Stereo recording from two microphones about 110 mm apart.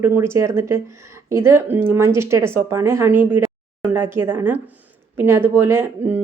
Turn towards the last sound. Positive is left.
turn(degrees=-20)  # may be behind; listen again after turning